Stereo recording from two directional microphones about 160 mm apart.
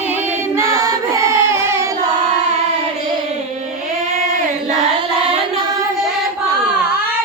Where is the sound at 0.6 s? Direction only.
20° right (ahead or behind).